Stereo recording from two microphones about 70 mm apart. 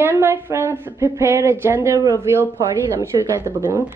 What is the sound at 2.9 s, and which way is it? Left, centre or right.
Speech, right.